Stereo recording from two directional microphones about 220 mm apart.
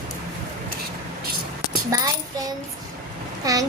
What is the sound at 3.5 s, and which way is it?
Speech, 15° right (ahead or behind).